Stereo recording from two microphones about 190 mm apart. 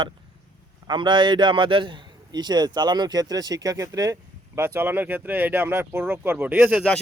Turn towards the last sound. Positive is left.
turn(degrees=-10)  # may be behind; listen again after turning